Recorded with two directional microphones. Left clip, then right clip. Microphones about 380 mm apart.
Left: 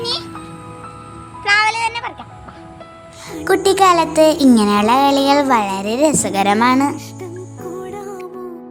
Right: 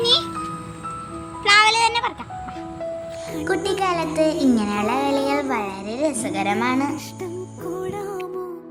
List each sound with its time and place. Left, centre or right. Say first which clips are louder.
0.0 s music: right 4 dB; centre
1.5 s music: even; centre
3.4 s speech: left 10 dB; centre
6.9 s music: left 1 dB; centre